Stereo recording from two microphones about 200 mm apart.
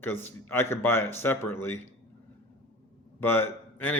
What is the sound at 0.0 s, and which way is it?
A man's voice, 10° left (ahead or behind).